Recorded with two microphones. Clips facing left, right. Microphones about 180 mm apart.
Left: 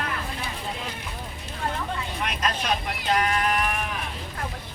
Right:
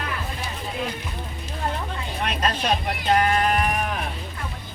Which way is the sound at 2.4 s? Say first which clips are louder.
Right 3 dB; 35° right (ahead or behind).